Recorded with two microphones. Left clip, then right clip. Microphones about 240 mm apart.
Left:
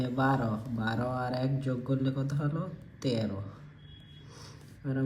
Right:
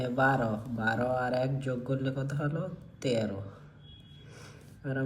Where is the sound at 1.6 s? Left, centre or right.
Left.